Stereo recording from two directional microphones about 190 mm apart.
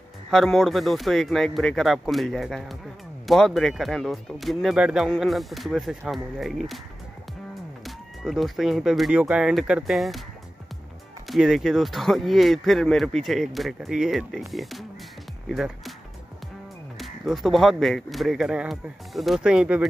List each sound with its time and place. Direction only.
0.3 s speech: centre (ahead or behind)
7.8 s speech: centre (ahead or behind)
11.2 s speech: centre (ahead or behind)
15.4 s music: centre (ahead or behind)
17.0 s speech: centre (ahead or behind)